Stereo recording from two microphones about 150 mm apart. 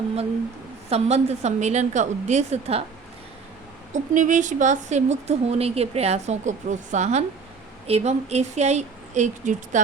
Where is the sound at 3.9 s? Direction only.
55° right (ahead or behind).